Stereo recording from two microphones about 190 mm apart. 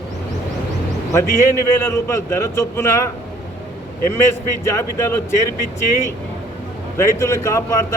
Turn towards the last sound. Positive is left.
turn(degrees=15)  # may be behind; listen again after turning